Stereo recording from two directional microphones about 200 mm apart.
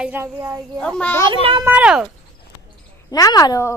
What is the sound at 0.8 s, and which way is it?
Speech, 5° left (ahead or behind).